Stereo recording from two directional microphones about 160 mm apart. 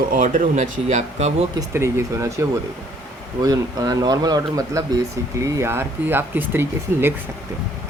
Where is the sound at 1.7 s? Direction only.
15° right (ahead or behind).